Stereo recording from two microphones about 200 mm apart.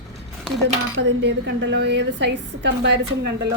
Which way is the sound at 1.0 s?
60° right (ahead or behind).